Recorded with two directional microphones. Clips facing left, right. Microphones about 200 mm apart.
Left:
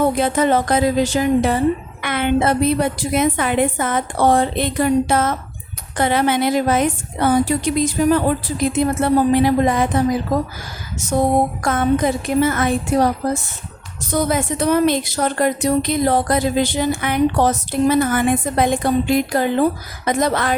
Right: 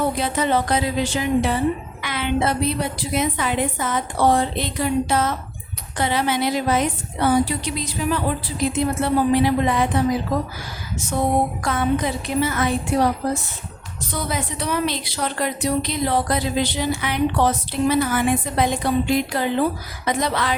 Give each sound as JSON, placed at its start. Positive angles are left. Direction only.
{"t": 0.0, "sound": "a woman's voice", "side_deg": 50}
{"t": 11.1, "sound": "a woman's voice", "side_deg": 45}